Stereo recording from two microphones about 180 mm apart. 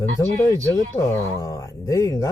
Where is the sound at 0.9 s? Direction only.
15° left (ahead or behind).